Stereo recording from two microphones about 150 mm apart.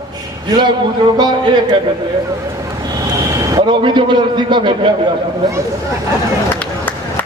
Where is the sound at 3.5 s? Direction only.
30° right (ahead or behind).